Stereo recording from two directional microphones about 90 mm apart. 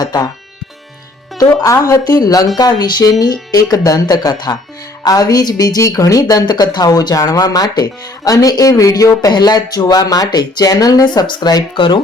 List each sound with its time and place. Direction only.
0.0 s speech: 45° left (ahead or behind)
1.6 s speech: 35° left (ahead or behind)
9.3 s speech: 50° left (ahead or behind)